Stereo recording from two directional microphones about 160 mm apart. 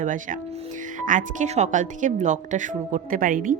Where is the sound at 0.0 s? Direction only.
55° right (ahead or behind).